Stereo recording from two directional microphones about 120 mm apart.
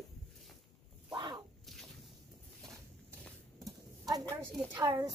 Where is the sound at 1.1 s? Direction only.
40° right (ahead or behind).